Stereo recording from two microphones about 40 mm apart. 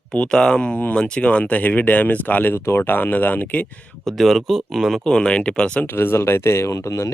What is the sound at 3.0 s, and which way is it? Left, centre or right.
Speech, left.